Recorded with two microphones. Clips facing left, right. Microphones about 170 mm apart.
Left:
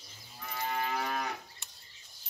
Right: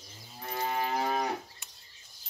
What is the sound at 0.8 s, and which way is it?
Moo, 35° right (ahead or behind).